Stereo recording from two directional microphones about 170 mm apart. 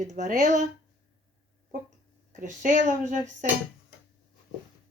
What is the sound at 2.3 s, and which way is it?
Speech, 50° right (ahead or behind).